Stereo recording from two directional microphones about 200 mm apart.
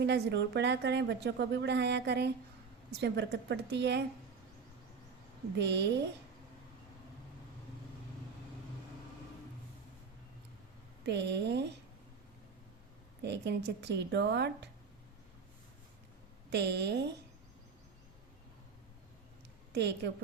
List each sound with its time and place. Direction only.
0.0 s a woman's voice: 60° right (ahead or behind)
5.5 s a woman's voice: 60° right (ahead or behind)
11.0 s a woman's voice: 60° right (ahead or behind)
13.2 s a woman's voice: 60° right (ahead or behind)
16.5 s a woman's voice: 60° right (ahead or behind)
19.7 s a woman's voice: 60° right (ahead or behind)